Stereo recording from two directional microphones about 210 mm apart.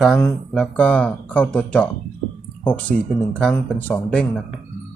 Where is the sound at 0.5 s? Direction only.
5° left (ahead or behind).